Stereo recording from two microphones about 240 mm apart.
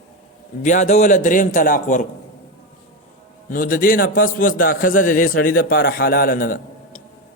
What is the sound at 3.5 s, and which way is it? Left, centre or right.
A man's voice, left.